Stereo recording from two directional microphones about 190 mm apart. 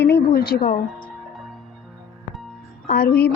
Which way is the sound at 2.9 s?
55° left (ahead or behind).